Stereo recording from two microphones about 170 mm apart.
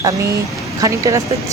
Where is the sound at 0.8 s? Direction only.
20° right (ahead or behind).